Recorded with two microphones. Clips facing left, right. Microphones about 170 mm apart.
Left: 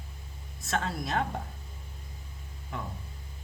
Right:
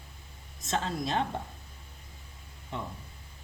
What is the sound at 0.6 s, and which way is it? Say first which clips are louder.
Speech: even; 30° right (ahead or behind).